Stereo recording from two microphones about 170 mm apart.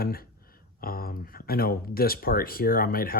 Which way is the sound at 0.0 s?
60° left (ahead or behind).